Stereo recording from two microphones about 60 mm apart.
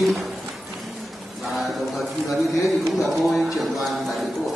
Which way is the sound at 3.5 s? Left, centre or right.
Centre.